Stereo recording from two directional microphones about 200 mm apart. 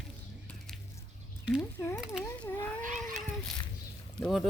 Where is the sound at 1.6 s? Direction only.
15° left (ahead or behind).